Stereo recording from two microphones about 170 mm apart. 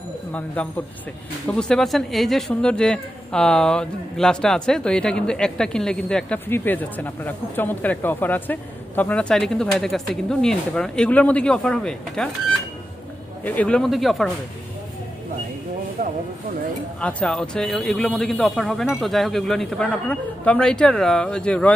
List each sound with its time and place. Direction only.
0.3 s speech: 10° left (ahead or behind)
13.4 s speech: 10° left (ahead or behind)
16.0 s speech: 50° right (ahead or behind)
17.0 s speech: 5° left (ahead or behind)